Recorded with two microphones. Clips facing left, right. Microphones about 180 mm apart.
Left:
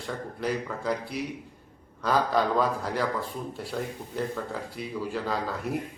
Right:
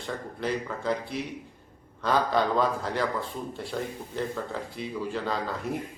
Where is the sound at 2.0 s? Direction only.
5° left (ahead or behind).